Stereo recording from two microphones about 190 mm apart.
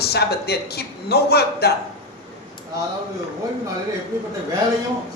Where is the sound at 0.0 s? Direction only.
55° left (ahead or behind).